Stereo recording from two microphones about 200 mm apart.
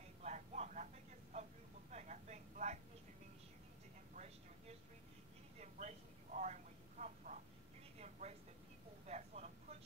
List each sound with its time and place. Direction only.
0.2 s vehicle: 35° right (ahead or behind)
1.9 s speech: 35° right (ahead or behind)
4.1 s speech: 35° right (ahead or behind)
5.6 s a sound: 35° right (ahead or behind)
8.0 s a woman's voice: 35° right (ahead or behind)
9.0 s vehicle: 35° right (ahead or behind)